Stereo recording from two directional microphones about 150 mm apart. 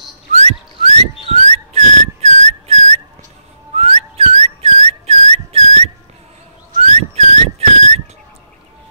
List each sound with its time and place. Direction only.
0.3 s whistling: 45° right (ahead or behind)